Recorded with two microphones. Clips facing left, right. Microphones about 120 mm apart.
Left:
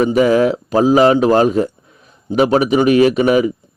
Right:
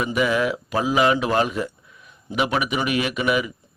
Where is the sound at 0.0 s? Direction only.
35° left (ahead or behind).